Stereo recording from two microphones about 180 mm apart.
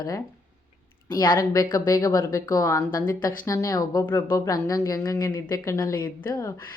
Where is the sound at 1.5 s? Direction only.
20° left (ahead or behind).